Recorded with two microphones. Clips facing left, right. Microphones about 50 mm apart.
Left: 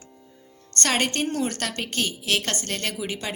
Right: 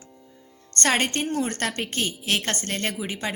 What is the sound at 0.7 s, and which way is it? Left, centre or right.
Speech, right.